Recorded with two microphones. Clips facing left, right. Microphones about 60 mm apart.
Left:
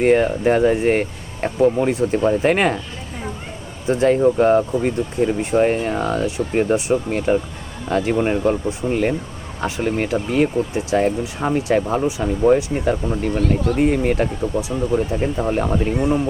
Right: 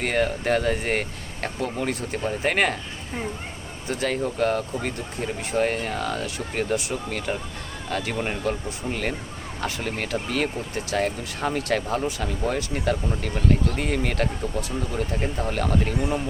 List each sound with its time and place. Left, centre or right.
0.0 s speech: left
2.2 s speech: left
3.8 s speech: left